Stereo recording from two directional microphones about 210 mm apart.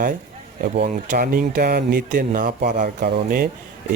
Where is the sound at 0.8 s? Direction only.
35° right (ahead or behind).